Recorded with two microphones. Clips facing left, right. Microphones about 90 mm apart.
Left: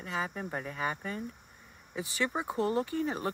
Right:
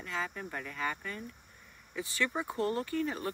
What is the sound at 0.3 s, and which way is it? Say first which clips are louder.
Speech: left 4 dB; 25° left (ahead or behind).